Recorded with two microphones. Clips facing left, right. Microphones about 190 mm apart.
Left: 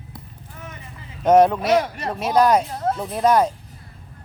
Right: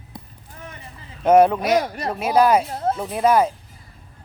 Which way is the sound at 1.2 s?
10° right (ahead or behind).